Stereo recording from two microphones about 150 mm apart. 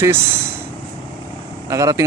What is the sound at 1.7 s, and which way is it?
Speech, 20° right (ahead or behind).